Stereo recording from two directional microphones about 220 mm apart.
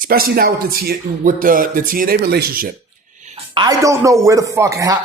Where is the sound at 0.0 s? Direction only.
40° right (ahead or behind).